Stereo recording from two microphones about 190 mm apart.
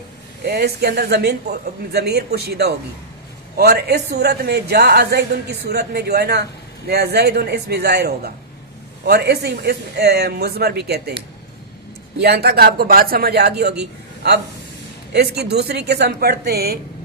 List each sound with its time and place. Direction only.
0.4 s a woman's voice: 60° right (ahead or behind)
12.2 s a woman's voice: 60° right (ahead or behind)
15.1 s a woman's voice: 60° right (ahead or behind)